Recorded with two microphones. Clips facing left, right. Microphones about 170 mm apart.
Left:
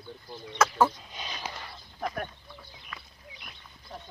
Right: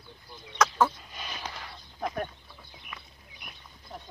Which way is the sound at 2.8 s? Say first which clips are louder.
Left 1 dB; 15° right (ahead or behind).